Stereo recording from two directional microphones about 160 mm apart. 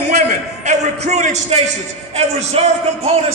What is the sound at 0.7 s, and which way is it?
A man's voice, 45° right (ahead or behind).